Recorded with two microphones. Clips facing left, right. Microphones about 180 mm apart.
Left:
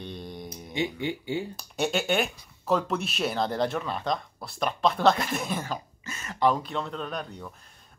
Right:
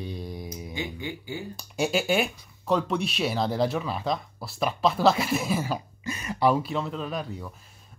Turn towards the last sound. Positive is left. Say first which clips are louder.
# right 2 dB
turn(degrees=-5)  # may be behind; listen again after turning